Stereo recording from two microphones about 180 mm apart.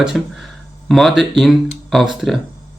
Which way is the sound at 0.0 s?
Centre (ahead or behind).